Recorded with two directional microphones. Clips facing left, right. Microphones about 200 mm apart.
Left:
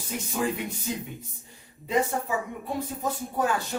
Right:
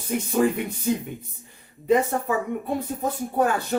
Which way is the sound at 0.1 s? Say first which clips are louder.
Right 7 dB; 55° right (ahead or behind).